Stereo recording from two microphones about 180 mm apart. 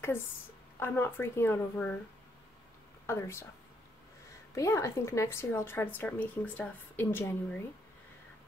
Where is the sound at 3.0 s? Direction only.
15° left (ahead or behind).